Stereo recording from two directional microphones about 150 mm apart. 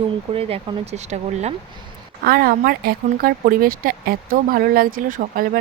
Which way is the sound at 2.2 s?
80° right.